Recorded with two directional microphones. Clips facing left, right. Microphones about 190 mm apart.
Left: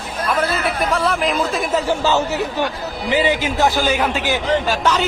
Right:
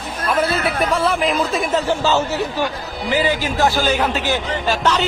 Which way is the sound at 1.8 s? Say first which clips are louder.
Even; 15° left (ahead or behind).